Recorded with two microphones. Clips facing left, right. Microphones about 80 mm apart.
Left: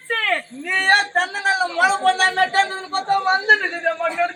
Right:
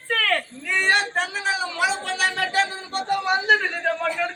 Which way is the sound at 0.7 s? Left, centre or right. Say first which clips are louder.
Left 4 dB; left.